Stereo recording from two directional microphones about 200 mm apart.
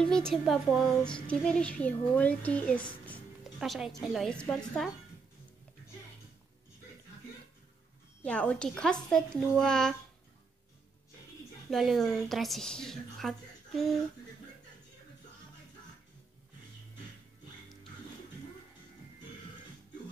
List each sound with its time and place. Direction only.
0.0 s speech: 5° left (ahead or behind)
3.1 s music: centre (ahead or behind)
4.0 s speech: centre (ahead or behind)
8.2 s speech: 5° left (ahead or behind)
11.7 s speech: centre (ahead or behind)